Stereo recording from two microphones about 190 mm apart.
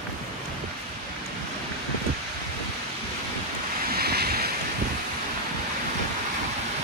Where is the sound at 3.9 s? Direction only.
55° right (ahead or behind).